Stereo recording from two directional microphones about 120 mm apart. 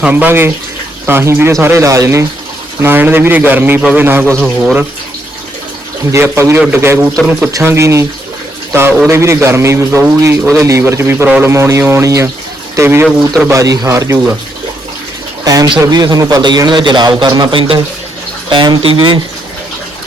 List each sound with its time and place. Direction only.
0.0 s a man's voice: 15° right (ahead or behind)
6.1 s a man's voice: 20° right (ahead or behind)
15.4 s a man's voice: 30° right (ahead or behind)